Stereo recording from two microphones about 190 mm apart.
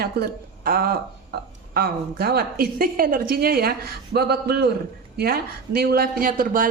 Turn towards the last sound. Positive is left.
turn(degrees=-45)  # may be behind; listen again after turning